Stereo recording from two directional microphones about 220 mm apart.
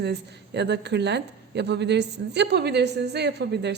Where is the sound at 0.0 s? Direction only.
50° right (ahead or behind).